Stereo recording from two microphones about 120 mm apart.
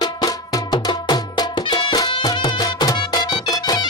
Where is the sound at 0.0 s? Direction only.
35° left (ahead or behind).